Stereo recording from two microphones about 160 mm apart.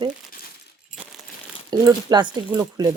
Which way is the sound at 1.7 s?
25° right (ahead or behind).